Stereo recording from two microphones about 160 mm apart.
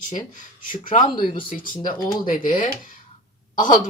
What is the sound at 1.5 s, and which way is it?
Speech, 60° left (ahead or behind).